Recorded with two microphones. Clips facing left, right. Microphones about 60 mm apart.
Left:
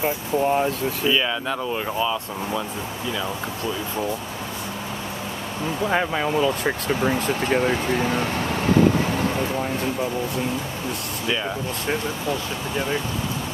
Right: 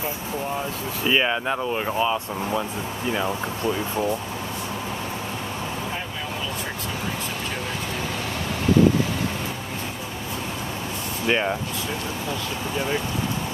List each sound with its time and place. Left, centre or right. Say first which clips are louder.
1.0 s speech: right 2 dB; right